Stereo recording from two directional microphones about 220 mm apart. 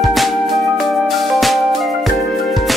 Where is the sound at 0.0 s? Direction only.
Centre (ahead or behind).